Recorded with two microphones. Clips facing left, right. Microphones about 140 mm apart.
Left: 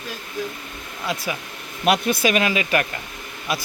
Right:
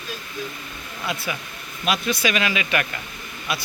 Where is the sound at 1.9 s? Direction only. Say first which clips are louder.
Left 4 dB; 55° left (ahead or behind); by 2.9 s 35° left (ahead or behind).